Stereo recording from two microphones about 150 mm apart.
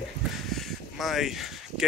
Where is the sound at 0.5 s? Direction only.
Centre (ahead or behind).